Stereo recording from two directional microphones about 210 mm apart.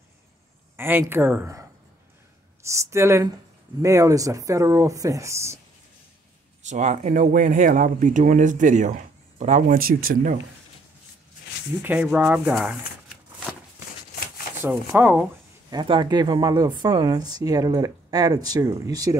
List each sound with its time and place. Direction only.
0.7 s speech: 10° right (ahead or behind)
6.6 s speech: 35° right (ahead or behind)
11.8 s speech: 10° right (ahead or behind)
14.6 s speech: 10° right (ahead or behind)
15.7 s speech: 20° right (ahead or behind)